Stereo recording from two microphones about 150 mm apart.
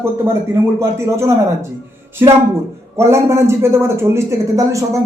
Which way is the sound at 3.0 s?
20° right (ahead or behind).